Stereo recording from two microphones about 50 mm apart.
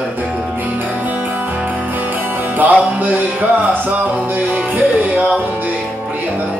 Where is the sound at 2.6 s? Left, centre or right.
Right.